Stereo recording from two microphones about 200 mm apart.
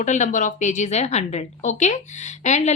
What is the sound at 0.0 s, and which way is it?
A woman's voice, 40° left (ahead or behind).